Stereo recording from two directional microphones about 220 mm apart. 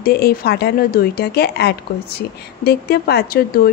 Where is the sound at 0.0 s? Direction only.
45° left (ahead or behind).